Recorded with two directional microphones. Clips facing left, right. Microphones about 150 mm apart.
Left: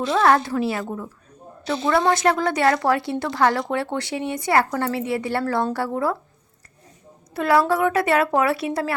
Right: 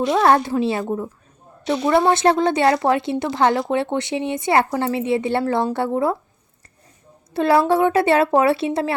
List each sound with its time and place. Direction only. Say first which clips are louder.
0.2 s a woman's voice: even; 25° right (ahead or behind)
7.3 s a woman's voice: right 3 dB; 25° right (ahead or behind)